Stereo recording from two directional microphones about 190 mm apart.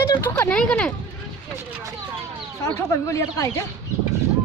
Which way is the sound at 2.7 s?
15° left (ahead or behind).